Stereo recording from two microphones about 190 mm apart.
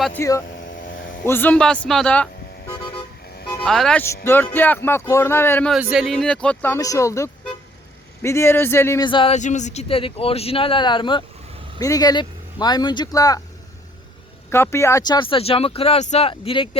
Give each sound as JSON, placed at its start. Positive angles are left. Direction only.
{"t": 0.0, "sound": "speech", "side_deg": 10}
{"t": 9.0, "sound": "speech", "side_deg": 25}
{"t": 14.5, "sound": "speech", "side_deg": 15}